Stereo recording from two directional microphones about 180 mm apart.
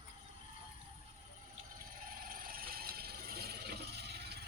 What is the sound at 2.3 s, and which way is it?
Vehicle, 55° right (ahead or behind).